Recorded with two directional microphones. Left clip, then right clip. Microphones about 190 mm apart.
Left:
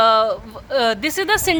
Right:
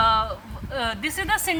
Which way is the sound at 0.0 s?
40° left (ahead or behind).